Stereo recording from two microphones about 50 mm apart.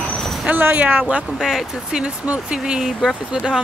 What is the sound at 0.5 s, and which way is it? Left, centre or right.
Speech, right.